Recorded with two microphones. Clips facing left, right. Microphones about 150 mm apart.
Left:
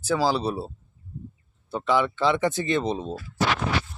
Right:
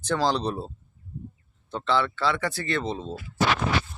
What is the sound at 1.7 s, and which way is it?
Speech, 10° left (ahead or behind).